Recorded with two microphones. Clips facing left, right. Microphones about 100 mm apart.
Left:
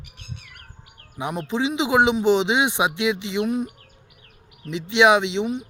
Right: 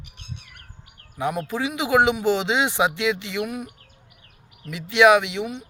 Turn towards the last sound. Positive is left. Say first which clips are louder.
# right 1 dB
turn(degrees=25)  # may be behind; listen again after turning